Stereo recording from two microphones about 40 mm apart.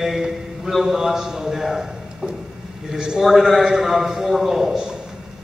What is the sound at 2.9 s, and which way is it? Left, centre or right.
Speech, right.